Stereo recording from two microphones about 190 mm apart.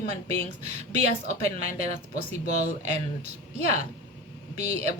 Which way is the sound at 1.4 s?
35° right (ahead or behind).